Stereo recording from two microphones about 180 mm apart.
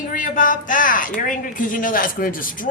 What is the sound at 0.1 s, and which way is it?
Speech, 50° left (ahead or behind).